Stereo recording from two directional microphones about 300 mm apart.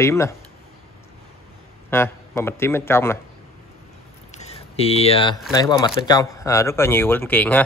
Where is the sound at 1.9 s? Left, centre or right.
Centre.